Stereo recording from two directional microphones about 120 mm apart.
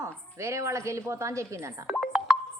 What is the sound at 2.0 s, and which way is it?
Music, 5° right (ahead or behind).